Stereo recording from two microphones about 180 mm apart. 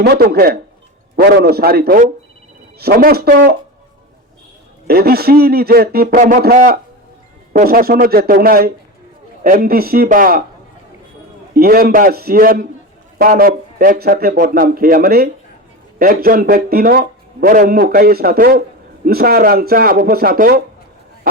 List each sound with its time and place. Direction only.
0.0 s a man's voice: 60° right (ahead or behind)
4.9 s a man's voice: 60° right (ahead or behind)
11.5 s a man's voice: 55° right (ahead or behind)